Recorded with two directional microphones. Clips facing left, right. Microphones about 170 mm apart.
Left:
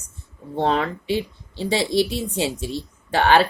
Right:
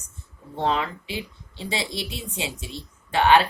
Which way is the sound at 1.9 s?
Centre (ahead or behind).